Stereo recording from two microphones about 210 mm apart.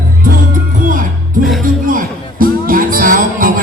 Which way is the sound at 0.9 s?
40° right (ahead or behind).